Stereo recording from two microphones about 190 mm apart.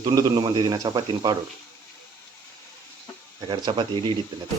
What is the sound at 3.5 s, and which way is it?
Speech, 25° right (ahead or behind).